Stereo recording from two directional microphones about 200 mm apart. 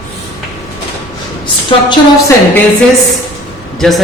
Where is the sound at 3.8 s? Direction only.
Centre (ahead or behind).